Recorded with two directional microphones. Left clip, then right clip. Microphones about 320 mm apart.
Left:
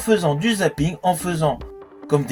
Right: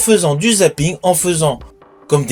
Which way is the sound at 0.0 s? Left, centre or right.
Left.